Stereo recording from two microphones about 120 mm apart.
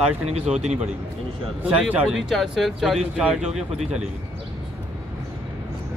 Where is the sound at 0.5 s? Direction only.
70° right (ahead or behind).